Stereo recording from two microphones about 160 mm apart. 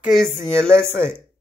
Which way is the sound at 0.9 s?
15° right (ahead or behind).